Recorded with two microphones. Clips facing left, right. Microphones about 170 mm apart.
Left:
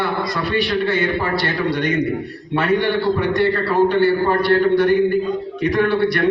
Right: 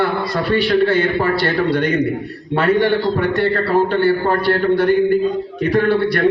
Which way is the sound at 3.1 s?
55° right (ahead or behind).